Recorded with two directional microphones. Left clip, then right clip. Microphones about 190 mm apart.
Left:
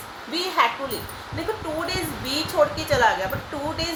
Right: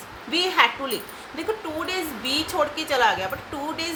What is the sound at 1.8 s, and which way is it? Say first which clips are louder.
Speech: even; 25° right (ahead or behind).